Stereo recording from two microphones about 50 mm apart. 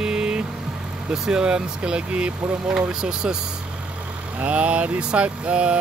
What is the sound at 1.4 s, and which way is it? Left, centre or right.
Speech, centre.